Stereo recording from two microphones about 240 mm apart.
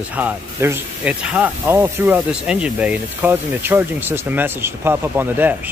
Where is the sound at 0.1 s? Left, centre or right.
Centre.